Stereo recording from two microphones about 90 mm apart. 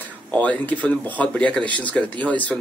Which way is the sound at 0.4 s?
15° left (ahead or behind).